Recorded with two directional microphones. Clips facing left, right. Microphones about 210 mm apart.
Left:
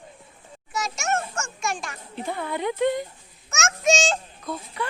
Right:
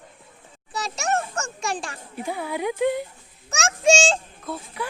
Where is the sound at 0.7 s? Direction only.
35° right (ahead or behind).